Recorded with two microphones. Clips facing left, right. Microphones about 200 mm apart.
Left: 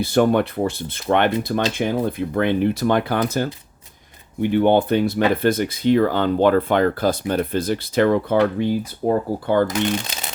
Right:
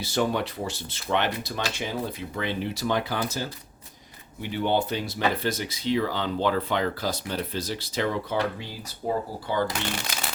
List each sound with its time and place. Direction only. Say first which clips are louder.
0.0 s speech: left 9 dB; 55° left (ahead or behind)